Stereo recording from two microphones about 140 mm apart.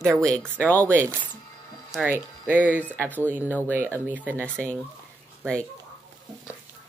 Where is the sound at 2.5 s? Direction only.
10° left (ahead or behind).